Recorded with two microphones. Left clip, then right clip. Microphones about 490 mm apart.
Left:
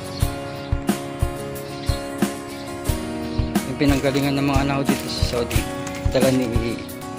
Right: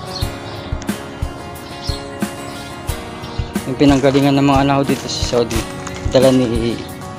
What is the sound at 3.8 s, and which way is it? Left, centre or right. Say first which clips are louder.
Speech: right 9 dB; right.